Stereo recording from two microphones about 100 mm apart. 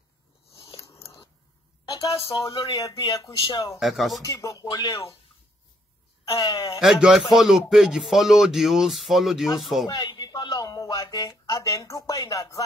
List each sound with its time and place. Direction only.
0.7 s biting: 30° left (ahead or behind)
1.9 s a sound: 35° left (ahead or behind)
2.7 s speech: 35° left (ahead or behind)
3.8 s speech: centre (ahead or behind)
4.2 s speech: 35° left (ahead or behind)
6.4 s speech: 40° left (ahead or behind)
6.8 s speech: 5° right (ahead or behind)
9.8 s speech: 50° left (ahead or behind)